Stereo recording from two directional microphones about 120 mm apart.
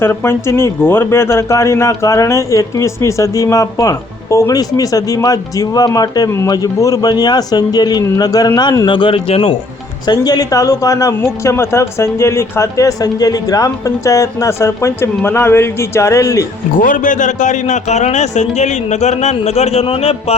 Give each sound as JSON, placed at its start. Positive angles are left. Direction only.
{"t": 0.0, "sound": "speech", "side_deg": 20}
{"t": 8.9, "sound": "speech", "side_deg": 45}
{"t": 10.1, "sound": "speech", "side_deg": 35}
{"t": 16.8, "sound": "a man's voice", "side_deg": 90}